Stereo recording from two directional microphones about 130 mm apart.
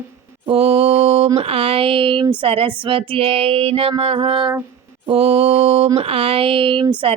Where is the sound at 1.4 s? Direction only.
50° right (ahead or behind).